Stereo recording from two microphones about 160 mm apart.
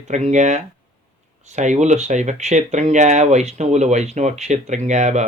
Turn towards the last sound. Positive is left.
turn(degrees=-50)  # may be behind; listen again after turning